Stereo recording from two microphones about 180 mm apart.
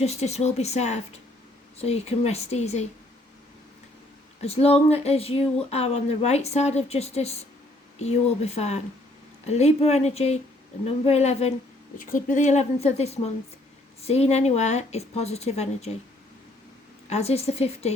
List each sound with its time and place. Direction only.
0.0 s speech: 35° left (ahead or behind)
4.4 s speech: 35° left (ahead or behind)
17.1 s speech: 35° left (ahead or behind)